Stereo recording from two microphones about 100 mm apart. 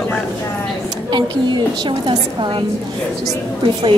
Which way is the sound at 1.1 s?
50° right (ahead or behind).